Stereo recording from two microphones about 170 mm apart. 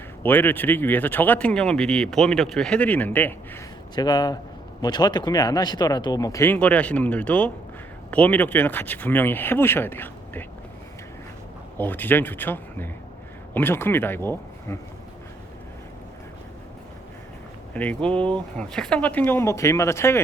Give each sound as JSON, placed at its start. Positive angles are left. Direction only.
{"t": 0.2, "sound": "speech", "side_deg": 10}
{"t": 3.9, "sound": "speech", "side_deg": 25}
{"t": 11.8, "sound": "speech", "side_deg": 10}
{"t": 17.7, "sound": "speech", "side_deg": 5}